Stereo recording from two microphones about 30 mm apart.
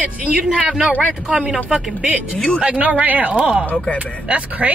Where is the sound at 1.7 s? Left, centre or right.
Centre.